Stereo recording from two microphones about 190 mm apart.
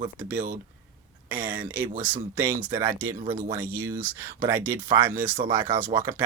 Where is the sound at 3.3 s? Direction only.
45° right (ahead or behind).